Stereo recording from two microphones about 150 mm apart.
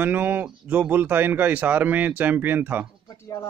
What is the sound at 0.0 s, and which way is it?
Speech, 10° right (ahead or behind).